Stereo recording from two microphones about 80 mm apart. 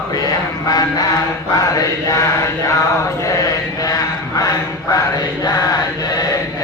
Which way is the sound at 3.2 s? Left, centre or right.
Left.